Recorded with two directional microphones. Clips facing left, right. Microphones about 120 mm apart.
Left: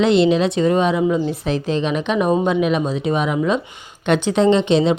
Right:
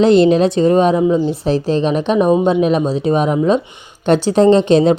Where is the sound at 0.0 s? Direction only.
40° right (ahead or behind).